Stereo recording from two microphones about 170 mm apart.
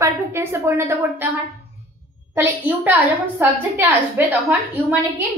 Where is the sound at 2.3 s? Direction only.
10° right (ahead or behind).